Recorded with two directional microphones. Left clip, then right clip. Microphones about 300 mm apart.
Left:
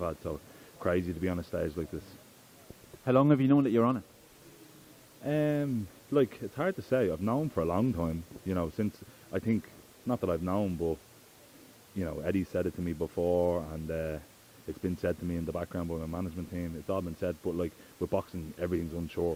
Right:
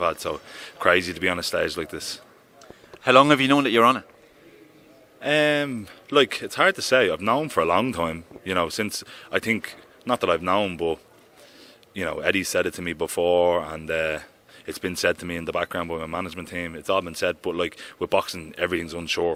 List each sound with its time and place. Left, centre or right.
0.0 s speech: centre
5.2 s speech: centre
10.7 s speech: right
11.9 s speech: centre
13.0 s speech: right
13.4 s speech: centre